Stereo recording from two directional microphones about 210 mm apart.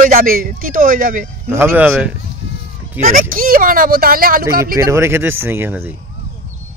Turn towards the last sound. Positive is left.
turn(degrees=-10)  # may be behind; listen again after turning